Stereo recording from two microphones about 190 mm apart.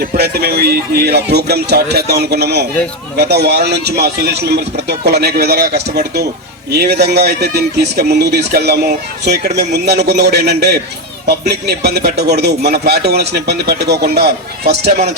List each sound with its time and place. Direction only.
0.0 s speech: 55° right (ahead or behind)